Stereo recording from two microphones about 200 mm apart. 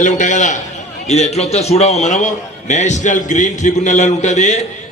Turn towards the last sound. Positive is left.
turn(degrees=35)  # may be behind; listen again after turning